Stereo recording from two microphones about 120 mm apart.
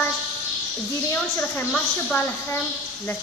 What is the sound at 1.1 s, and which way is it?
A woman's voice, 15° left (ahead or behind).